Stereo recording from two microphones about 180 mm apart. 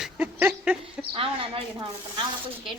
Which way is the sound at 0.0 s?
10° right (ahead or behind).